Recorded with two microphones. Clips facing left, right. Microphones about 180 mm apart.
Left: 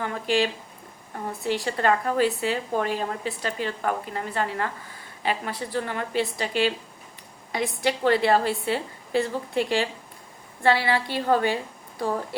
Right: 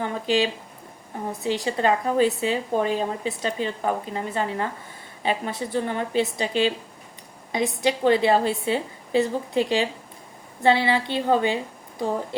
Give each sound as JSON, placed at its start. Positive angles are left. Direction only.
{"t": 0.0, "sound": "a woman's voice", "side_deg": -20}
{"t": 7.8, "sound": "a woman's voice", "side_deg": -20}